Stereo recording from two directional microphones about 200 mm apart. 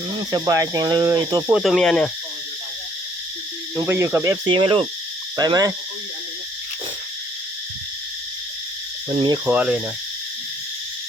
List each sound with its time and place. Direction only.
0.2 s speech: 20° right (ahead or behind)
1.5 s speech: centre (ahead or behind)
3.8 s speech: 10° right (ahead or behind)
5.4 s owl: 20° right (ahead or behind)
9.5 s speech: 10° right (ahead or behind)